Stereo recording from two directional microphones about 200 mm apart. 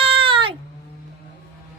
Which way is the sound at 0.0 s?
25° right (ahead or behind).